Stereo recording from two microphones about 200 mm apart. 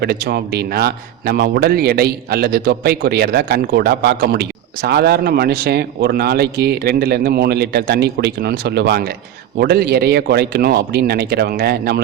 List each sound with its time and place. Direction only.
0.0 s a man's voice: 55° right (ahead or behind)